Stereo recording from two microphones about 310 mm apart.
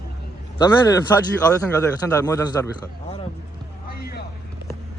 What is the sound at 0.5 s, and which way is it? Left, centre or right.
A man's voice, centre.